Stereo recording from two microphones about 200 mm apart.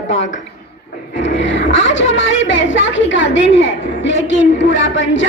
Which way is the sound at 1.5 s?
70° left (ahead or behind).